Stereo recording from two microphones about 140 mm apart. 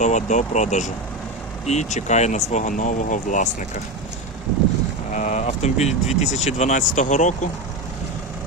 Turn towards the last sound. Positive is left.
turn(degrees=60)  # may be behind; listen again after turning